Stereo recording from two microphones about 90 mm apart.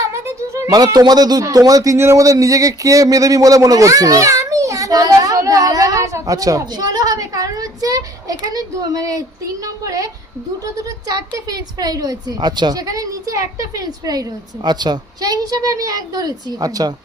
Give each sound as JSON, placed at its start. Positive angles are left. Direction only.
{"t": 0.1, "sound": "music", "side_deg": -30}
{"t": 0.9, "sound": "a man's voice", "side_deg": -50}